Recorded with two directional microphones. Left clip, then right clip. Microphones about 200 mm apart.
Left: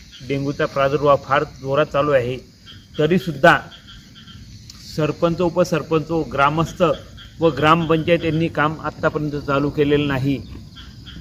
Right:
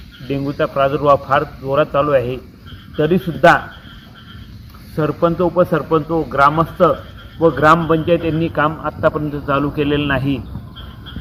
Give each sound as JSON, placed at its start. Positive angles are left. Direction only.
{"t": 0.3, "sound": "a man's voice", "side_deg": 0}
{"t": 4.9, "sound": "a man's voice", "side_deg": -15}